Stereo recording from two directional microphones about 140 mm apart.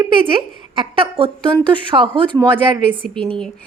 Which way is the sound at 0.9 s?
40° right (ahead or behind).